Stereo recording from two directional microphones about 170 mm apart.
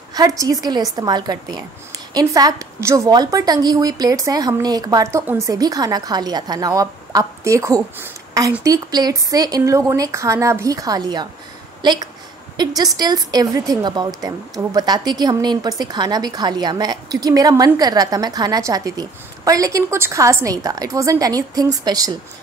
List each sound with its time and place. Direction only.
0.1 s a woman's voice: 20° right (ahead or behind)